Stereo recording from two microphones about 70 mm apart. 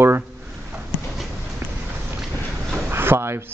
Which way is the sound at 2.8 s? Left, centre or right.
Right.